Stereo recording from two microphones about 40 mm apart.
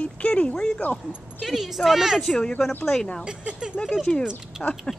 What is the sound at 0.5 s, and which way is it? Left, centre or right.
Speech, centre.